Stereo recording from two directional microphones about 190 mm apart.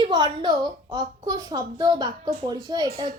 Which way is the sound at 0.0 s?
25° right (ahead or behind).